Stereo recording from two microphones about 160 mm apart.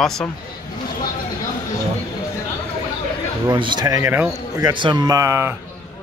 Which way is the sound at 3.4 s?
30° right (ahead or behind).